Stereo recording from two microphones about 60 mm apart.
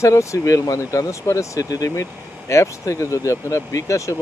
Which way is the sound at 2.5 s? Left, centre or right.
Left.